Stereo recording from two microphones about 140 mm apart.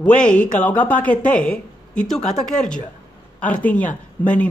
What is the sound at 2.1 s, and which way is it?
Speech, 55° left (ahead or behind).